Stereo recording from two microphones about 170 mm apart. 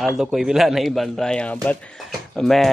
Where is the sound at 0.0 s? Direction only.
Centre (ahead or behind).